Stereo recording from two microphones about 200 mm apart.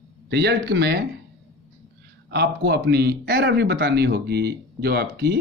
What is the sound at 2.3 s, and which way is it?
Speech, 55° right (ahead or behind).